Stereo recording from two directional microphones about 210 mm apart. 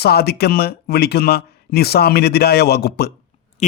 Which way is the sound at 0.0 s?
50° left (ahead or behind).